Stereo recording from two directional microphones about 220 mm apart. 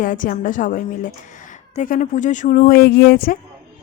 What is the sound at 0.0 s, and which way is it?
A woman's voice, 40° left (ahead or behind).